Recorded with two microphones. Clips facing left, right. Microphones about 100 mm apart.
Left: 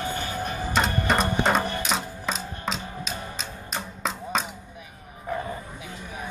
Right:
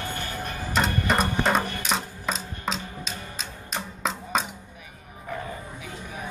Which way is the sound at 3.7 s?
Centre (ahead or behind).